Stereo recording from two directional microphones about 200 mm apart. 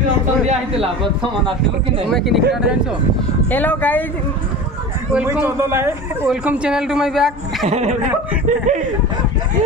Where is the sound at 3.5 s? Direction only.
10° left (ahead or behind).